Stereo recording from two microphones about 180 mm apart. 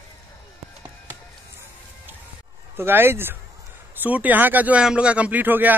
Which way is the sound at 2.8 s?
10° right (ahead or behind).